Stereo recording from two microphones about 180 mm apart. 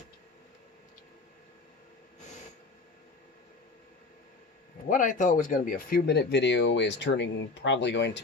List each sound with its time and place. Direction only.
4.9 s speech: 45° left (ahead or behind); by 8.2 s 80° left